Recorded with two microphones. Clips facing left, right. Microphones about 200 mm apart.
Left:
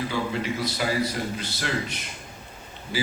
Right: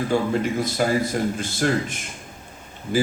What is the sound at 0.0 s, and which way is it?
A man's voice, 50° right (ahead or behind).